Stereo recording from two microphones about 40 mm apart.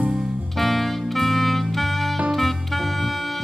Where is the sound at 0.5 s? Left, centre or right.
Centre.